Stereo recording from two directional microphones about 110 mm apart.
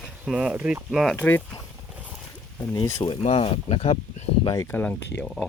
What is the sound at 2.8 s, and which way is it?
Speech, 35° left (ahead or behind).